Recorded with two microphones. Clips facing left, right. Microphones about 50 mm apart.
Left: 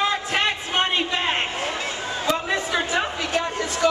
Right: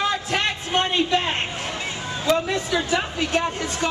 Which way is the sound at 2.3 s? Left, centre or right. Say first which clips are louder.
Right 2 dB; left.